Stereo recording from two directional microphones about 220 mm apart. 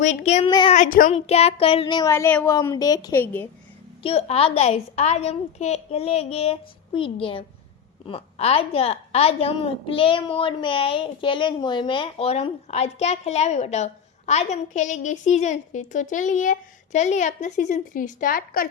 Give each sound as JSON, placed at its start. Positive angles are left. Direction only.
{"t": 0.0, "sound": "a woman's voice", "side_deg": 35}
{"t": 0.8, "sound": "speech", "side_deg": 35}
{"t": 4.0, "sound": "a woman's voice", "side_deg": 30}